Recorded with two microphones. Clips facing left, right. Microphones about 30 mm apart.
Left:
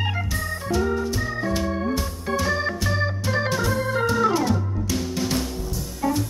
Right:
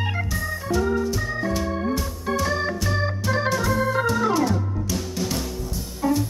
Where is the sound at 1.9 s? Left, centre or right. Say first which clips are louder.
Even; centre.